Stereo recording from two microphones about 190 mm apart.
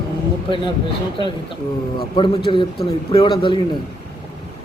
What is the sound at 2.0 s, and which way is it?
Speech, 25° left (ahead or behind).